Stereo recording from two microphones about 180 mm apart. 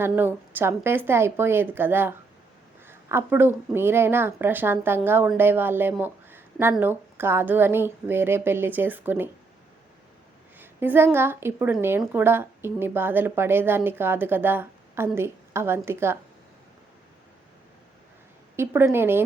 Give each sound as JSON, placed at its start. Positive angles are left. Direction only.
{"t": 0.0, "sound": "a woman's voice", "side_deg": -10}
{"t": 10.6, "sound": "a woman's voice", "side_deg": -10}
{"t": 18.5, "sound": "a woman's voice", "side_deg": -15}